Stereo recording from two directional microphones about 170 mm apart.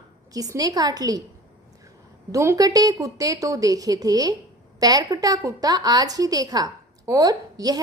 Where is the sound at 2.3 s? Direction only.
15° right (ahead or behind).